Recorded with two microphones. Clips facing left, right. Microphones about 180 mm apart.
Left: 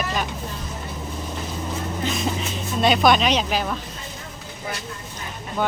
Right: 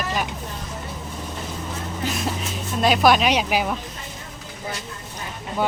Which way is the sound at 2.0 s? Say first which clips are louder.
Even; 5° right (ahead or behind).